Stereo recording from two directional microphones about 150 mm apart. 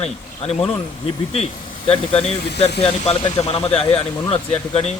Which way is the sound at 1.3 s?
40° left (ahead or behind).